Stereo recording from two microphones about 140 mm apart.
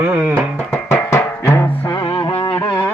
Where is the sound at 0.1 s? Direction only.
15° right (ahead or behind).